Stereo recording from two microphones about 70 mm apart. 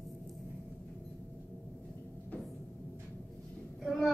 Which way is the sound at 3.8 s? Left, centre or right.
Centre.